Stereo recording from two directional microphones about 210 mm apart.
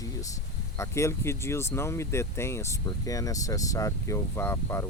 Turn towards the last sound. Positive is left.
turn(degrees=10)  # may be behind; listen again after turning